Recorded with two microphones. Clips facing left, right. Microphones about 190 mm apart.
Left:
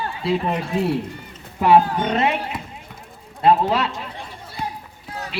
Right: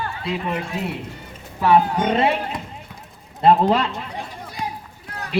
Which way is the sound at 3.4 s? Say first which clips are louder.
Right 1 dB; 45° right (ahead or behind).